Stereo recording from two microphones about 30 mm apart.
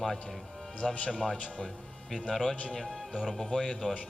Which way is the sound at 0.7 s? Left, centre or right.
Left.